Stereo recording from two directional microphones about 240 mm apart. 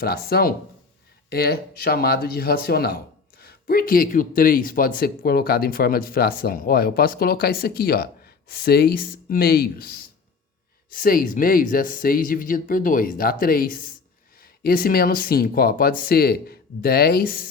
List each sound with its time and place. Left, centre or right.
0.0 s speech: left